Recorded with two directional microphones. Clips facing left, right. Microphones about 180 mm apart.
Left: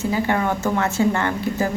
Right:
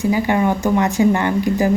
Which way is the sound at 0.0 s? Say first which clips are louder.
Right 4 dB; 15° right (ahead or behind).